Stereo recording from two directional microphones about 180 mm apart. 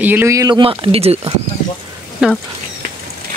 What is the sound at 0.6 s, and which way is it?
Speech, 30° right (ahead or behind).